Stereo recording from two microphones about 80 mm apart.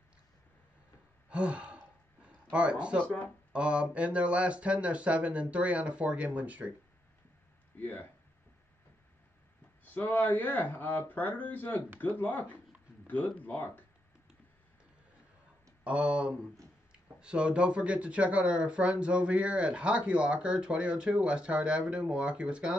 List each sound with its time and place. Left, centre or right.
1.3 s gasp: centre
2.5 s speech: centre
7.8 s speech: left
9.8 s speech: left
15.8 s speech: centre